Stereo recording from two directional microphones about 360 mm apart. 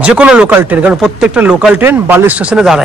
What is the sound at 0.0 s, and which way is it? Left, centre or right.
Speech, centre.